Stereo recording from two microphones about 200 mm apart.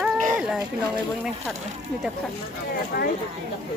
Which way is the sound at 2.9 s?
55° left (ahead or behind).